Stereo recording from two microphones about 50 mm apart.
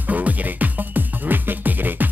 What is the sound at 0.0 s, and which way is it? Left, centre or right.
Music, right.